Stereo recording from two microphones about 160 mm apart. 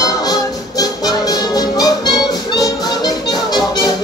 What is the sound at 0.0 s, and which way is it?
Music, 25° left (ahead or behind).